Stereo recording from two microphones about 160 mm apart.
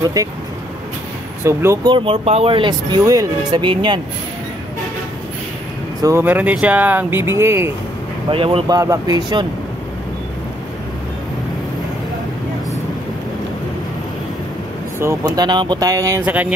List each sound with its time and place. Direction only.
0.0 s speech: 20° right (ahead or behind)
1.4 s speech: 15° right (ahead or behind)
1.9 s speech: 35° right (ahead or behind)
6.0 s speech: 15° right (ahead or behind)
8.3 s speech: 35° right (ahead or behind)
8.7 s speech: 20° right (ahead or behind)
15.0 s speech: 20° right (ahead or behind)
16.3 s speech: 10° right (ahead or behind)